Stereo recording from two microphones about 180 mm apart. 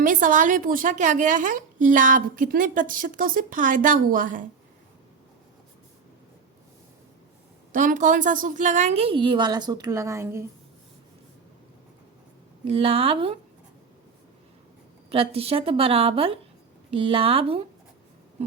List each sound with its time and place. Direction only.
0.0 s a woman's voice: 50° right (ahead or behind)
7.7 s a woman's voice: 45° right (ahead or behind); by 10.4 s 15° right (ahead or behind)
12.6 s a woman's voice: 30° right (ahead or behind)
15.1 s a woman's voice: 30° right (ahead or behind)
18.4 s a sound: 35° right (ahead or behind)